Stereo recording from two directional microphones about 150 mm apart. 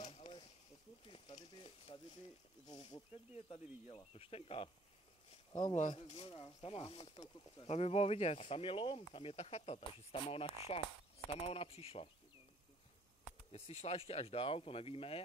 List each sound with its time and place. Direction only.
0.1 s snake: 40° left (ahead or behind)
1.0 s speech: 35° left (ahead or behind)
2.7 s speech: 25° left (ahead or behind)
5.5 s speech: 30° left (ahead or behind)
13.5 s speech: 45° left (ahead or behind)